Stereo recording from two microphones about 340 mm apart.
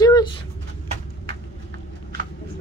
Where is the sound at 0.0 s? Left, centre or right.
Centre.